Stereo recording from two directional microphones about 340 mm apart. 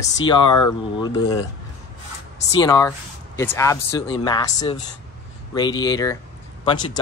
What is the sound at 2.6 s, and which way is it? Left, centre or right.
Speech, centre.